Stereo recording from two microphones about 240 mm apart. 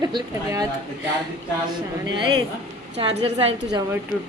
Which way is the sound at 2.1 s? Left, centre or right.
Centre.